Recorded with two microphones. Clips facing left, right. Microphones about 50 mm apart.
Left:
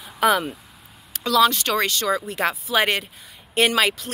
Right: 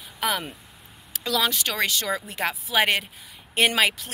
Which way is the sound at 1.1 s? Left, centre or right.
Centre.